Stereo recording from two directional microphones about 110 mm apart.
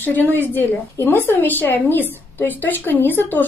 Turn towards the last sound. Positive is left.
turn(degrees=20)  # may be behind; listen again after turning